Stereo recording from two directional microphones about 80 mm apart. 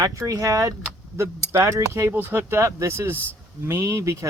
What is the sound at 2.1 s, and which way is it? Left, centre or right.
Speech, right.